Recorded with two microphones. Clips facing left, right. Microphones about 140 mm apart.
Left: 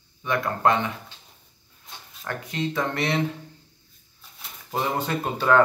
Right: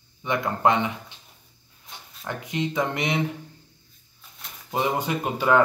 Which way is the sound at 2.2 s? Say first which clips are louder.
Right 1 dB; 15° right (ahead or behind).